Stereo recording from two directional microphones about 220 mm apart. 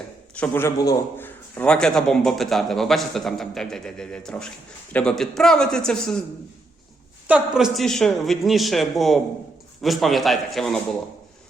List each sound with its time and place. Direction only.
0.3 s a man's voice: 10° left (ahead or behind)
7.3 s a man's voice: 5° right (ahead or behind)